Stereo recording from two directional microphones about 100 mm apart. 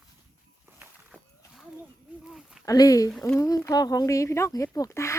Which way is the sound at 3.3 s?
35° left (ahead or behind).